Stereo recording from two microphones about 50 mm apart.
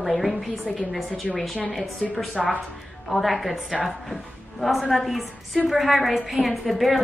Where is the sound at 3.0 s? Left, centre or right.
Centre.